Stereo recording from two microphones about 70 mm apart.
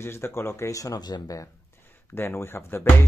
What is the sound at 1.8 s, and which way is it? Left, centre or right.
Speech, left.